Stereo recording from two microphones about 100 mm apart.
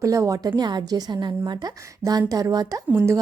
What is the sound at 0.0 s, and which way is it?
Speech, 35° right (ahead or behind).